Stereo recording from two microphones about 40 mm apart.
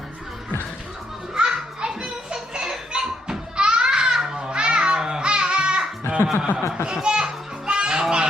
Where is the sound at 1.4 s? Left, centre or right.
Centre.